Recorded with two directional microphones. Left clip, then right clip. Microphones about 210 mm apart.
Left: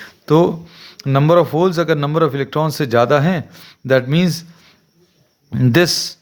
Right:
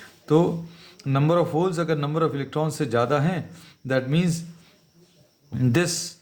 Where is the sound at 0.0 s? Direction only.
40° left (ahead or behind).